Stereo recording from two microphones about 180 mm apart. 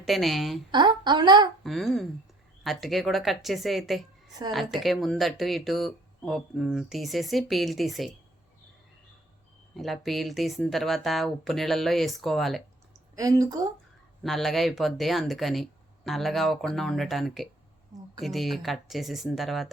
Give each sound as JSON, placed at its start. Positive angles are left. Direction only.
{"t": 0.0, "sound": "speech", "side_deg": 0}
{"t": 0.7, "sound": "a woman's voice", "side_deg": -25}
{"t": 1.6, "sound": "speech", "side_deg": 0}
{"t": 9.7, "sound": "speech", "side_deg": 0}
{"t": 13.1, "sound": "a woman's voice", "side_deg": -20}
{"t": 14.3, "sound": "speech", "side_deg": 0}